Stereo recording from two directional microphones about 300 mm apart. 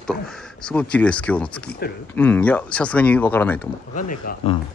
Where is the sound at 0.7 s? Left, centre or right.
Centre.